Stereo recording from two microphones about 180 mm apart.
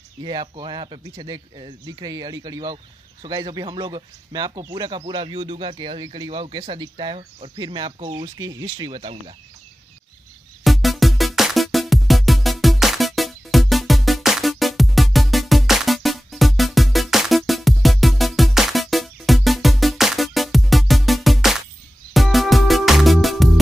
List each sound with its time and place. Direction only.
0.2 s speech: 25° right (ahead or behind)
10.6 s music: centre (ahead or behind)